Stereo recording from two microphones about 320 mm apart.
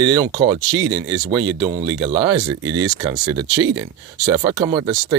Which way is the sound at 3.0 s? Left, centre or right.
Centre.